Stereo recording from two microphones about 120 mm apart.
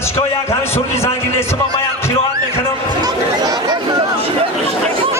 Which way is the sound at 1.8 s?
20° left (ahead or behind).